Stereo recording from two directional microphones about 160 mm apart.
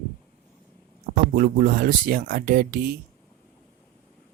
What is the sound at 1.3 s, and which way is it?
Speech, 60° right (ahead or behind).